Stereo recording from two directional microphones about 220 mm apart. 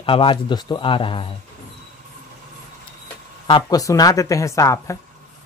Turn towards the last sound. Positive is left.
turn(degrees=15)  # may be behind; listen again after turning